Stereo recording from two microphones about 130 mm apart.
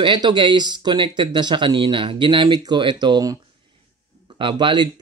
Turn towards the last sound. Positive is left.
turn(degrees=-40)  # may be behind; listen again after turning